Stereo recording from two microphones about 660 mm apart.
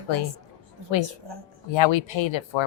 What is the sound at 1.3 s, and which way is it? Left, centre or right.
Speech, right.